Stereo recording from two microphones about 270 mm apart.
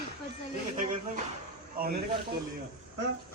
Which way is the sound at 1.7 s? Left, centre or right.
Right.